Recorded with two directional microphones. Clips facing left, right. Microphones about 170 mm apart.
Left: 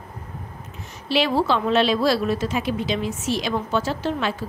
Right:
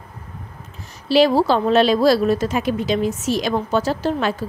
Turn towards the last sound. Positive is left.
turn(degrees=-40)  # may be behind; listen again after turning